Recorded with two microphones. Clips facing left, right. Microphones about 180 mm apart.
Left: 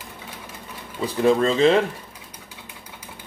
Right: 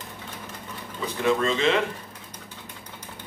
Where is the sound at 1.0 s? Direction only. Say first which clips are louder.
Left 5 dB; 35° left (ahead or behind).